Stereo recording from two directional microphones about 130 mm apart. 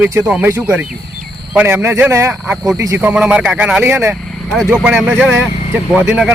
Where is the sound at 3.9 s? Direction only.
20° right (ahead or behind).